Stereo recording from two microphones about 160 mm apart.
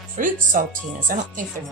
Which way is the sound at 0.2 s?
60° right (ahead or behind).